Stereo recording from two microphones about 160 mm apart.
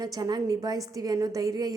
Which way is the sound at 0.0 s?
25° right (ahead or behind).